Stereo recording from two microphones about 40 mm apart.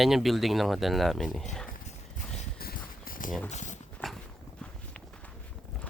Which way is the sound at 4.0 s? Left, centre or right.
Left.